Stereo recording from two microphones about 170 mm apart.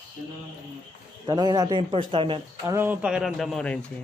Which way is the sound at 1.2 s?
25° right (ahead or behind).